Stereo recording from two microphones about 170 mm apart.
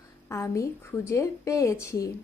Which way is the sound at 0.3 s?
15° left (ahead or behind).